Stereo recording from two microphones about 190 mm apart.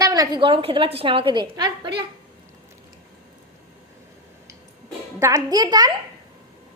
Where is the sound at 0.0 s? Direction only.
20° right (ahead or behind).